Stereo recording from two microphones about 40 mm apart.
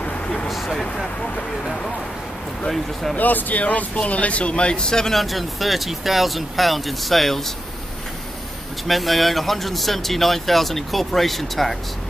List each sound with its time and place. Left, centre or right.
0.5 s speech: centre
2.7 s speech: centre
3.2 s speech: left; by 5.1 s centre
5.1 s speech: centre
8.8 s speech: centre